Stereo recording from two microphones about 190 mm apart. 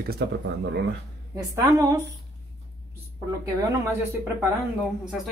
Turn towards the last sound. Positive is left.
turn(degrees=0)  # may be behind; listen again after turning